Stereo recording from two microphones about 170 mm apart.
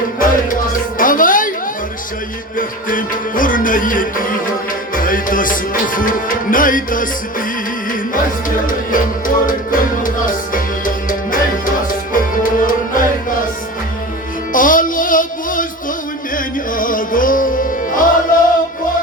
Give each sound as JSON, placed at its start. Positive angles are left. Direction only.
{"t": 0.2, "sound": "music", "side_deg": 55}
{"t": 2.6, "sound": "music", "side_deg": 55}
{"t": 14.5, "sound": "music", "side_deg": 50}